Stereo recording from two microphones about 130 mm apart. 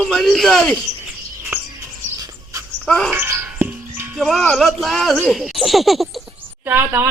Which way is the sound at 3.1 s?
20° right (ahead or behind).